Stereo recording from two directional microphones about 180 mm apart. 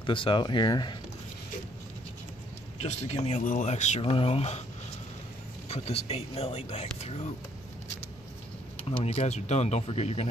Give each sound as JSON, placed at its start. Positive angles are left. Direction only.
{"t": 0.0, "sound": "speech", "side_deg": 30}
{"t": 2.8, "sound": "speech", "side_deg": 40}
{"t": 5.7, "sound": "speech", "side_deg": 35}
{"t": 9.0, "sound": "speech", "side_deg": 35}